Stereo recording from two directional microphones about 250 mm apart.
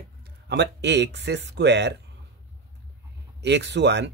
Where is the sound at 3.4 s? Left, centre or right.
Right.